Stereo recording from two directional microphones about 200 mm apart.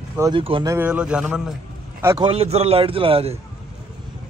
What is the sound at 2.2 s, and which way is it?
A man's voice, 30° right (ahead or behind).